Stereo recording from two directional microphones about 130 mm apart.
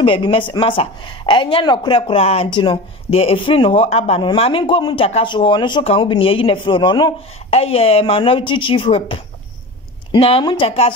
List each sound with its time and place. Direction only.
0.0 s speech: 40° left (ahead or behind)
7.5 s speech: 50° left (ahead or behind)